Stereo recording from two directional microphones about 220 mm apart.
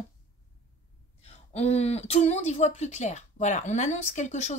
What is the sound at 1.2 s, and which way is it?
Speech, 30° left (ahead or behind).